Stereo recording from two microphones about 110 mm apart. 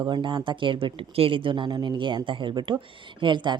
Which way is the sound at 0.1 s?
50° right (ahead or behind).